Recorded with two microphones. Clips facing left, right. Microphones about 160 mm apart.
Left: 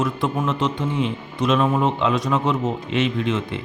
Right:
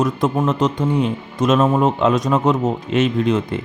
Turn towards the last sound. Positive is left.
turn(degrees=-40)  # may be behind; listen again after turning